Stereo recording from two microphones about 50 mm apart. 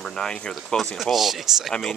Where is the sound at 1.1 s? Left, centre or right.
Centre.